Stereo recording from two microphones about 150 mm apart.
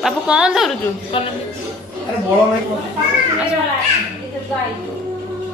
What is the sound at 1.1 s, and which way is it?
Speech, 35° left (ahead or behind).